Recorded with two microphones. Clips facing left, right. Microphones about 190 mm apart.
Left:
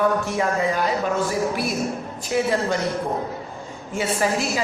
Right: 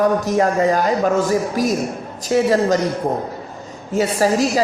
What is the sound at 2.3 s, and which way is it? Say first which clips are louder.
Speech: right 6 dB; 40° right (ahead or behind).